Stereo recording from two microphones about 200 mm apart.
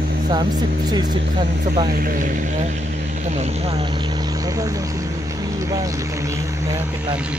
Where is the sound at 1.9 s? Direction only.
45° right (ahead or behind); by 6.9 s 15° right (ahead or behind).